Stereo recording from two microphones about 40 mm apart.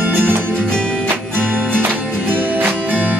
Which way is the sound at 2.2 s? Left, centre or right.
Right.